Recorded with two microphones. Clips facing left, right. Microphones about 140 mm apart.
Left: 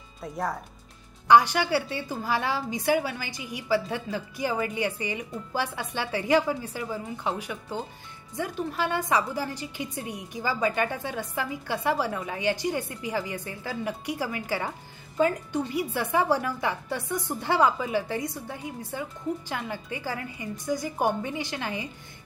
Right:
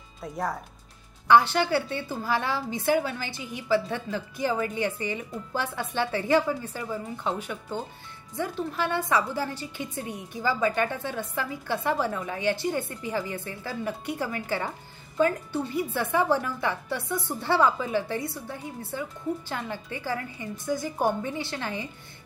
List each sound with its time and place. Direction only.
0.2 s speech: centre (ahead or behind)
1.2 s a woman's voice: 15° left (ahead or behind)